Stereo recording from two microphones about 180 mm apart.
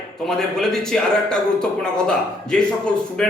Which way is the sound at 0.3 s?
5° left (ahead or behind).